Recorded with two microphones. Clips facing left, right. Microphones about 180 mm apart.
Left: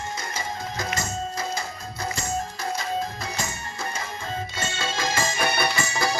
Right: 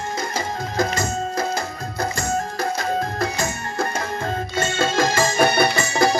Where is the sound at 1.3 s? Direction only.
65° right (ahead or behind).